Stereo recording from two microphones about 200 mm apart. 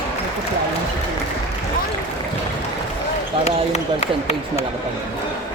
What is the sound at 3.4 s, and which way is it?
Speech, 35° left (ahead or behind).